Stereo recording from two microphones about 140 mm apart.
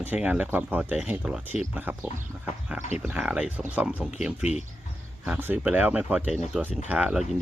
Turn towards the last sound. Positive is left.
turn(degrees=-5)  # may be behind; listen again after turning